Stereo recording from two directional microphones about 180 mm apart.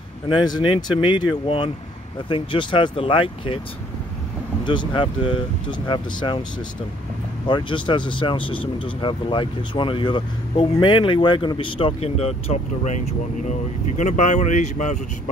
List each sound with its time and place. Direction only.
0.3 s speech: 25° left (ahead or behind)
4.6 s speech: 25° left (ahead or behind)
7.4 s speech: 25° left (ahead or behind); by 15.0 s 40° left (ahead or behind)